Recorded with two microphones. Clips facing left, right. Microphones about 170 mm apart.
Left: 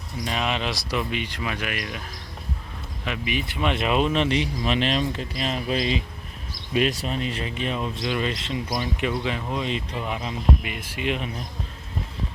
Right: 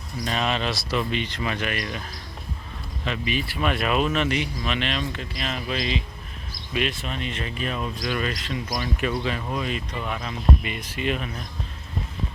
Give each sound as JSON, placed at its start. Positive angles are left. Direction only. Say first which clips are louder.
{"t": 0.3, "sound": "speech", "louder": "right 1 dB", "side_deg": 10}
{"t": 3.0, "sound": "speech", "louder": "right 1 dB", "side_deg": 10}
{"t": 7.5, "sound": "speech", "louder": "left 1 dB", "side_deg": 20}
{"t": 10.6, "sound": "speech", "louder": "right 1 dB", "side_deg": 5}